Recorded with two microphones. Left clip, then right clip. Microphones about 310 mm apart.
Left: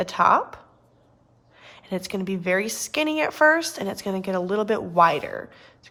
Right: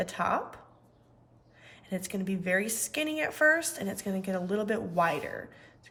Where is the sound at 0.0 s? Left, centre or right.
Centre.